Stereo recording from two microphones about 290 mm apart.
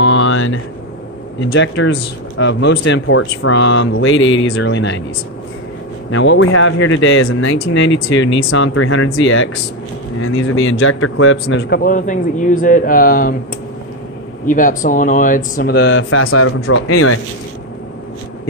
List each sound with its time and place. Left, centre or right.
0.0 s a sound: left
1.4 s speech: left
6.1 s speech: left
14.4 s speech: left